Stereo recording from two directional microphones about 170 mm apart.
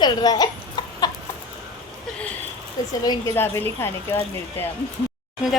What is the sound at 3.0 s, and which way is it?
Speech, 15° left (ahead or behind).